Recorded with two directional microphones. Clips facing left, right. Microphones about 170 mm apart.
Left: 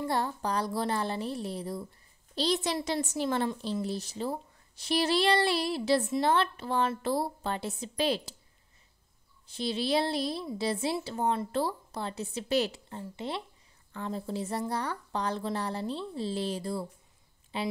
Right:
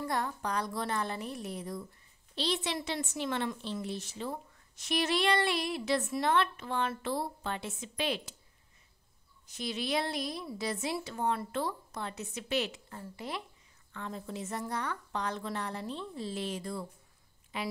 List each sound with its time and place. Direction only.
0.0 s a woman's voice: 30° left (ahead or behind)
9.5 s a woman's voice: 30° left (ahead or behind)
13.0 s a woman's voice: 25° left (ahead or behind)